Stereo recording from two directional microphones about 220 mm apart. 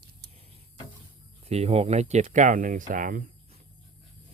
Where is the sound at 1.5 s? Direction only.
30° right (ahead or behind).